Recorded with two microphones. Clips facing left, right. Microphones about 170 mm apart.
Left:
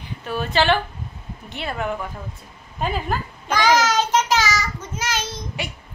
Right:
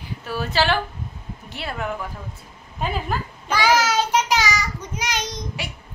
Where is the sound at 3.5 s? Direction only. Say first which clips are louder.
Left 1 dB; 10° right (ahead or behind).